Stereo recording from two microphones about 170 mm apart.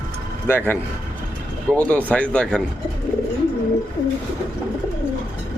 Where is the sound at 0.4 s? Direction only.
10° left (ahead or behind).